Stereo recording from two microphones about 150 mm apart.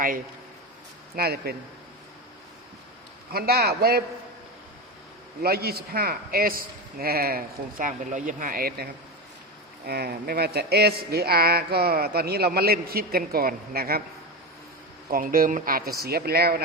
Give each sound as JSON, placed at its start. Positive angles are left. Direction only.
{"t": 1.1, "sound": "speech", "side_deg": -90}
{"t": 3.3, "sound": "speech", "side_deg": -90}
{"t": 5.4, "sound": "a man's voice", "side_deg": -90}
{"t": 15.1, "sound": "a man's voice", "side_deg": -70}